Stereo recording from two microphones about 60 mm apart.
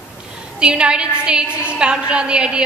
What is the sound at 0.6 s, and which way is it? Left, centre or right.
A woman's voice, centre.